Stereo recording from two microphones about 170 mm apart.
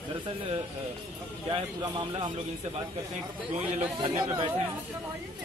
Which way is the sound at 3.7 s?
30° right (ahead or behind).